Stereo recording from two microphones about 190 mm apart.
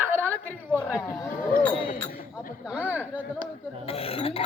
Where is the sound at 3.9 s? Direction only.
30° left (ahead or behind).